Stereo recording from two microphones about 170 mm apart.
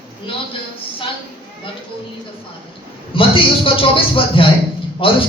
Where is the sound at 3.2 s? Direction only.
30° left (ahead or behind).